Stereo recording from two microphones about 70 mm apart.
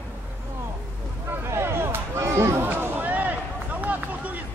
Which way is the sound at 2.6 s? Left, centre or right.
Right.